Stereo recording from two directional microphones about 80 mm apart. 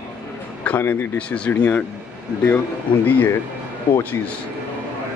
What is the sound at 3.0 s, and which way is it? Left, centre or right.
Speech, left.